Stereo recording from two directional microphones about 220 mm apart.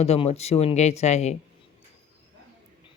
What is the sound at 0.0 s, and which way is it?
Speech, 30° left (ahead or behind).